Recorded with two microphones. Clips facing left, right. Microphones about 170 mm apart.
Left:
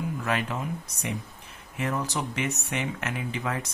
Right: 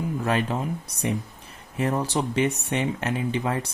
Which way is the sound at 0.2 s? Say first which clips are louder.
Right 5 dB; 35° right (ahead or behind).